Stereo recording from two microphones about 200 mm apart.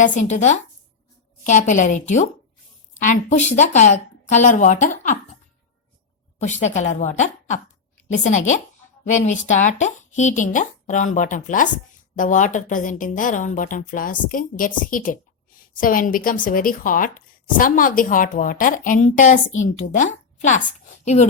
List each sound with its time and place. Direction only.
0.0 s a woman's voice: 40° left (ahead or behind)
6.4 s a woman's voice: 35° left (ahead or behind)